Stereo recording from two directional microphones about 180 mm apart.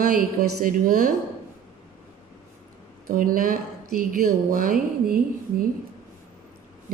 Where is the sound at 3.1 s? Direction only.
50° right (ahead or behind).